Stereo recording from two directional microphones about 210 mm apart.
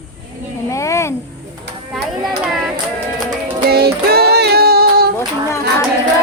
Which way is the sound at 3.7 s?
50° right (ahead or behind).